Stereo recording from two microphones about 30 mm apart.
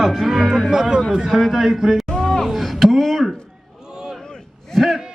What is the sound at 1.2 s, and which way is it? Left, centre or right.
Speech, centre.